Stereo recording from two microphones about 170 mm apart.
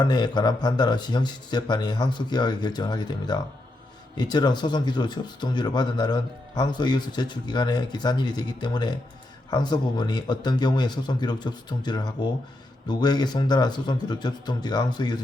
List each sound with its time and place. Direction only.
0.0 s speech: 25° left (ahead or behind)